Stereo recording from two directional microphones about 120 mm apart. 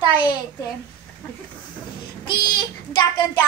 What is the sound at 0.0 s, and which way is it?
Speech, 35° left (ahead or behind).